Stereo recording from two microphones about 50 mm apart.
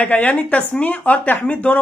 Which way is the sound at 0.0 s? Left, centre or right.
Left.